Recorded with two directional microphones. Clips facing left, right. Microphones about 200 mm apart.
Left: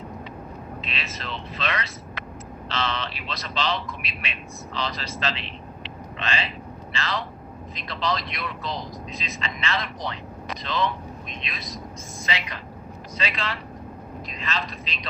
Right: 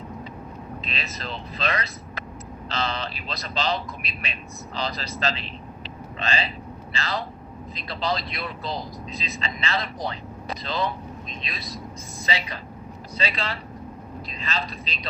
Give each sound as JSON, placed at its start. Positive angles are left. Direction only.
{"t": 0.9, "sound": "speech", "side_deg": -35}